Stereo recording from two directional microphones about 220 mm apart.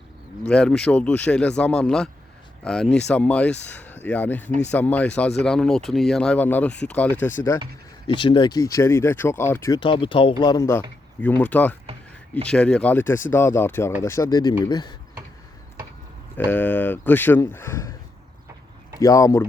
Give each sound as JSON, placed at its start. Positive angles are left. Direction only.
{"t": 0.4, "sound": "speech", "side_deg": 5}
{"t": 8.0, "sound": "speech", "side_deg": 20}
{"t": 16.4, "sound": "speech", "side_deg": 10}
{"t": 18.9, "sound": "speech", "side_deg": 15}